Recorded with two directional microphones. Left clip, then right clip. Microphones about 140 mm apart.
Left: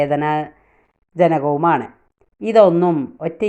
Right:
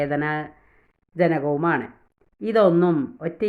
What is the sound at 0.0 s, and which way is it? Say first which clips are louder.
Speech: left 6 dB; 15° left (ahead or behind).